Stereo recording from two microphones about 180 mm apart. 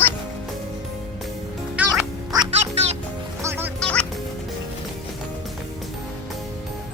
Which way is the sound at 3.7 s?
5° left (ahead or behind).